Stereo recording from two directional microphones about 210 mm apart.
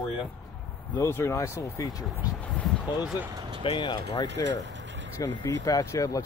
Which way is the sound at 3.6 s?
25° left (ahead or behind).